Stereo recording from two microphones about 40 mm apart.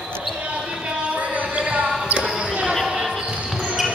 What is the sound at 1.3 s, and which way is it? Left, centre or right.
Music, right.